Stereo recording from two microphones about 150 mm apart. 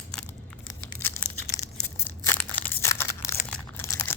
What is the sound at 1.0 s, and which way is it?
Tearing, 15° left (ahead or behind).